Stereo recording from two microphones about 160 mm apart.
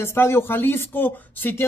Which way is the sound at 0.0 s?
15° left (ahead or behind).